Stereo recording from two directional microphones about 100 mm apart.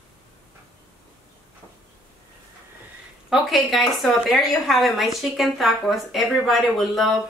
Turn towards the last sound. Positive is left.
turn(degrees=0)  # may be behind; listen again after turning